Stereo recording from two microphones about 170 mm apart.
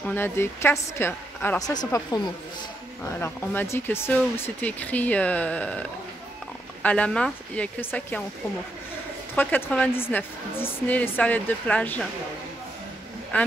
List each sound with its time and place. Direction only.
0.0 s a woman's voice: 10° left (ahead or behind)
9.3 s speech: 10° left (ahead or behind)
13.3 s speech: 10° left (ahead or behind)